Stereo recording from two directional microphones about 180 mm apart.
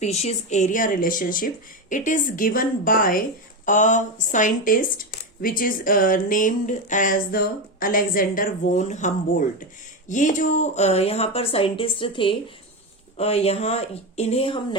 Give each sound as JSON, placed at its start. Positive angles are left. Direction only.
{"t": 0.0, "sound": "speech", "side_deg": 35}